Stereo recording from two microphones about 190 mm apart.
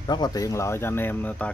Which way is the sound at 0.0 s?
20° left (ahead or behind).